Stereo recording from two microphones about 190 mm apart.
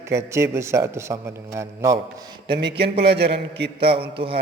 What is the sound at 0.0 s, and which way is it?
A man's voice, 15° right (ahead or behind).